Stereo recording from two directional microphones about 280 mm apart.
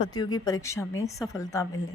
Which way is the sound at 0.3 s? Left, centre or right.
Centre.